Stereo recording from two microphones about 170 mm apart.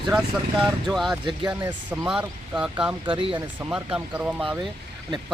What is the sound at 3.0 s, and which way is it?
Speech, 30° right (ahead or behind).